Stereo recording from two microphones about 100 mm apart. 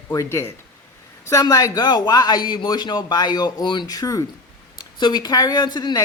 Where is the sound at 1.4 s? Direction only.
40° left (ahead or behind).